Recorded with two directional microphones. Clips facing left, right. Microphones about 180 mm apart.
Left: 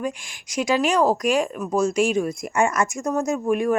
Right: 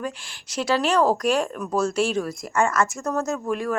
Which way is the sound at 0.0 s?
10° left (ahead or behind).